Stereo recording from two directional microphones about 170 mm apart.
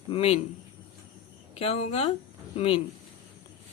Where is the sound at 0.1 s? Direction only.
35° left (ahead or behind).